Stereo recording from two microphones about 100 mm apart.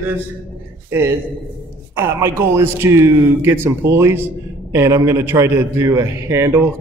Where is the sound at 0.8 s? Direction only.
25° right (ahead or behind).